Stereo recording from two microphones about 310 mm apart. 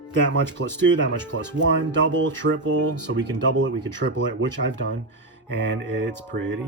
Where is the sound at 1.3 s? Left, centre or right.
Right.